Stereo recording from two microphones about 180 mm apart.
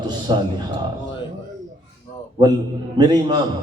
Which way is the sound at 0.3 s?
25° right (ahead or behind).